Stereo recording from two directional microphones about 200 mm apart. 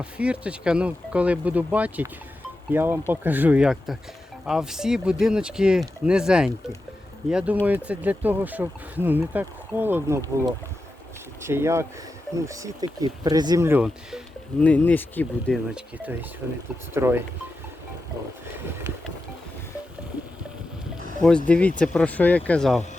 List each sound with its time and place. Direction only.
0.0 s speech: 5° right (ahead or behind)
14.6 s speech: 10° left (ahead or behind); by 17.2 s 10° right (ahead or behind)
18.4 s speech: 10° right (ahead or behind)
21.2 s speech: 5° left (ahead or behind)